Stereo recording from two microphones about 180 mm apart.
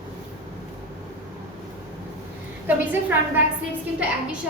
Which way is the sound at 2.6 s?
10° right (ahead or behind).